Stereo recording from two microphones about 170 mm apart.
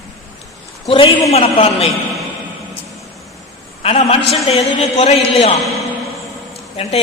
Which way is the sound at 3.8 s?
40° left (ahead or behind).